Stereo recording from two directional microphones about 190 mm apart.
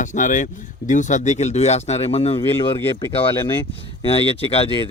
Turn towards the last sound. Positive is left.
turn(degrees=30)  # may be behind; listen again after turning